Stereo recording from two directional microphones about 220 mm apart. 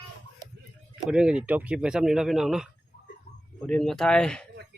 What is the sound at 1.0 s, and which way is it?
A man's voice, 5° right (ahead or behind).